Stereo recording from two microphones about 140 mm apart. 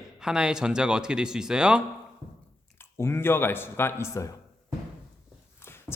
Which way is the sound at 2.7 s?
15° left (ahead or behind).